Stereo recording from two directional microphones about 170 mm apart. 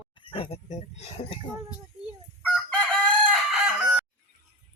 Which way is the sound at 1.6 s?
5° right (ahead or behind).